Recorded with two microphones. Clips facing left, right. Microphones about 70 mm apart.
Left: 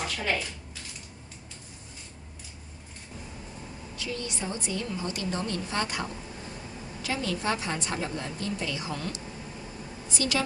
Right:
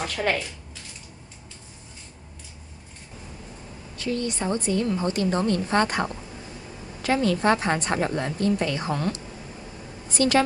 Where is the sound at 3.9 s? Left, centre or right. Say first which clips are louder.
Right 8 dB; right.